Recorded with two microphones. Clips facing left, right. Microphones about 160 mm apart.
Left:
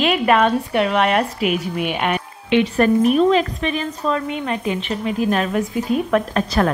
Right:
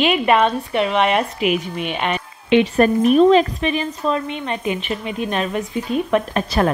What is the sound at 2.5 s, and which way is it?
Speech, 20° right (ahead or behind).